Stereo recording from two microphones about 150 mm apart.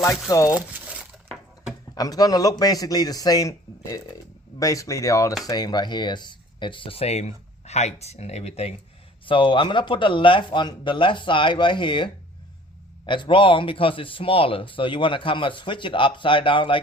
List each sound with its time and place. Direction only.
0.3 s a man's voice: 20° left (ahead or behind)
0.5 s a sound: 10° right (ahead or behind)
2.0 s a man's voice: 25° left (ahead or behind); by 8.7 s 45° left (ahead or behind)
9.2 s speech: 35° left (ahead or behind)